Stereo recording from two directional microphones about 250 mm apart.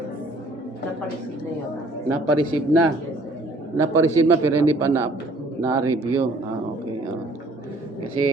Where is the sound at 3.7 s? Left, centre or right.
Centre.